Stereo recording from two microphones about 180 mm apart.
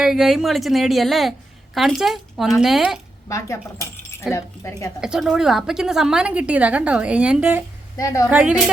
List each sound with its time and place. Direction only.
0.0 s a woman's voice: centre (ahead or behind)
3.2 s speech: 15° left (ahead or behind)
4.9 s a woman's voice: 5° right (ahead or behind)
7.9 s a woman's voice: 15° left (ahead or behind)
8.3 s a woman's voice: 5° right (ahead or behind)